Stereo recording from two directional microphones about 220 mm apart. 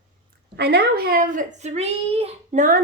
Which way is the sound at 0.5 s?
50° right (ahead or behind).